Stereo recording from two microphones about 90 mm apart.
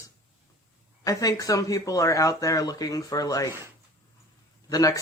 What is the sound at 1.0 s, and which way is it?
Speech, 40° left (ahead or behind).